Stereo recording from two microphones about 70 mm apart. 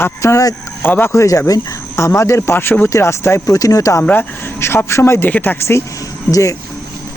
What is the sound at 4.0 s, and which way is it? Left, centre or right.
Speech, left.